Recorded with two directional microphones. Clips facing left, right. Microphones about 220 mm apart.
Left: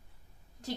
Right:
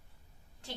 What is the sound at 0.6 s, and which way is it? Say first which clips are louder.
Speech: left 8 dB; 40° left (ahead or behind).